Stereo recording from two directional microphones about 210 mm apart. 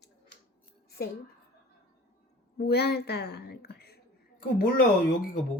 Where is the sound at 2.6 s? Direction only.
50° left (ahead or behind).